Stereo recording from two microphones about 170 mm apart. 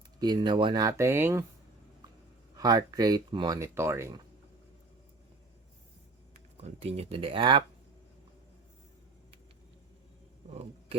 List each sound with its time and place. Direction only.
0.2 s speech: 25° right (ahead or behind)
2.6 s speech: 20° right (ahead or behind)
6.6 s speech: 35° right (ahead or behind)
10.5 s a man's voice: 35° right (ahead or behind)